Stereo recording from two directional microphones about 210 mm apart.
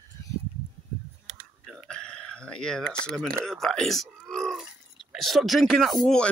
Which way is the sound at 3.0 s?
5° left (ahead or behind).